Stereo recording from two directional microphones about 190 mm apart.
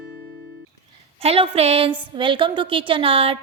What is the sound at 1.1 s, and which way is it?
A woman's voice, 30° right (ahead or behind).